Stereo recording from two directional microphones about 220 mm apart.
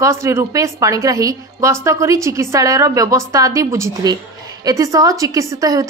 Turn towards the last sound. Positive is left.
turn(degrees=-15)  # may be behind; listen again after turning